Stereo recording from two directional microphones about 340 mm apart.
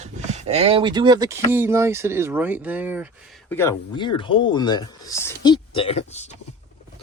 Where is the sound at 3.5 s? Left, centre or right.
Centre.